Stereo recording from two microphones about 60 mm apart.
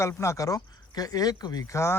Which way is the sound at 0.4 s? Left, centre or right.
Left.